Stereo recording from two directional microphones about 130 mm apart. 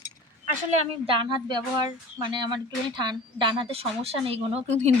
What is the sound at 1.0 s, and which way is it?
Speech, 40° right (ahead or behind).